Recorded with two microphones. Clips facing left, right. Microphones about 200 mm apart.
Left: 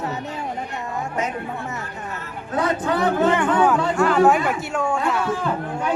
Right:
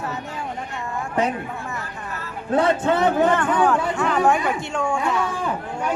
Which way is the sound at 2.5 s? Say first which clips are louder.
Right 3 dB; 25° right (ahead or behind).